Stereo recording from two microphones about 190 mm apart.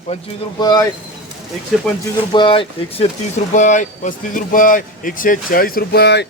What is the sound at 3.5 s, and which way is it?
Speech, 40° left (ahead or behind).